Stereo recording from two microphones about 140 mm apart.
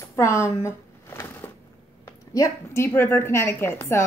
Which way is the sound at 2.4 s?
20° left (ahead or behind).